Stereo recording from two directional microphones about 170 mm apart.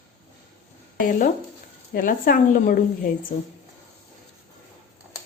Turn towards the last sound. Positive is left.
turn(degrees=55)  # may be behind; listen again after turning